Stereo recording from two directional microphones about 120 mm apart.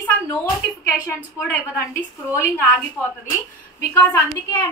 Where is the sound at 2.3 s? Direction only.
15° left (ahead or behind).